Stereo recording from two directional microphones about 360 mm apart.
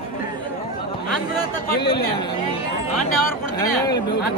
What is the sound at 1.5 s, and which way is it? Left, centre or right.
Speech, centre.